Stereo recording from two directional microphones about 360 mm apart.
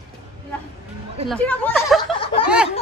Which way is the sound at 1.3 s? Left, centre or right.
Centre.